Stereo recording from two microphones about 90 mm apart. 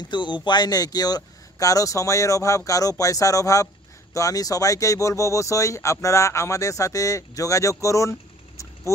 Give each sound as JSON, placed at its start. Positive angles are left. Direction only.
{"t": 0.0, "sound": "speech", "side_deg": 60}